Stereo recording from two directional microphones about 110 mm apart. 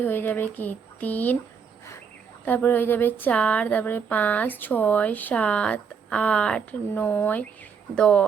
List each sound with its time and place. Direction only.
0.0 s speech: 20° left (ahead or behind)
2.4 s speech: 15° left (ahead or behind)